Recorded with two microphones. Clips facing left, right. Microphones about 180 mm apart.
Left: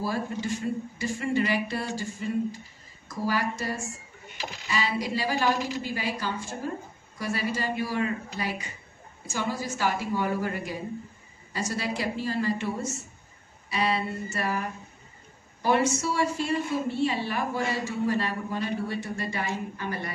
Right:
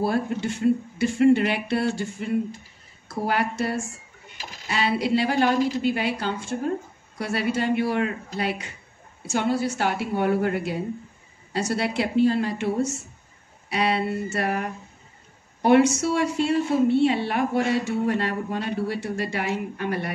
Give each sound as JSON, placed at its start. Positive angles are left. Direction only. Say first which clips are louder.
{"t": 0.0, "sound": "a woman's voice", "louder": "right 6 dB", "side_deg": -70}